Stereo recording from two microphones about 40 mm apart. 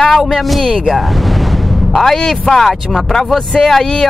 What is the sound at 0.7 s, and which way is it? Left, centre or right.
Speech, centre.